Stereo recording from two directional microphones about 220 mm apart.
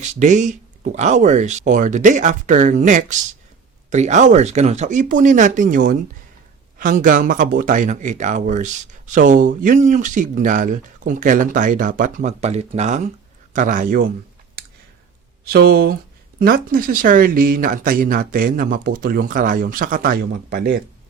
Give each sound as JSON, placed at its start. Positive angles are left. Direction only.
{"t": 0.2, "sound": "speech", "side_deg": -35}
{"t": 15.4, "sound": "speech", "side_deg": -45}